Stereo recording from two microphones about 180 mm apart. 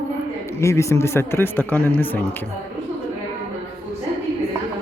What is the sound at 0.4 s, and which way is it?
Speech, 15° left (ahead or behind).